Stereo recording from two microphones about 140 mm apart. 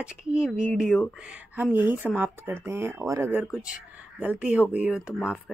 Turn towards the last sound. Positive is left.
turn(degrees=10)  # may be behind; listen again after turning